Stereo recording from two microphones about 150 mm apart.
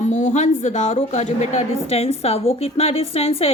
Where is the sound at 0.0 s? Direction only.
55° left (ahead or behind).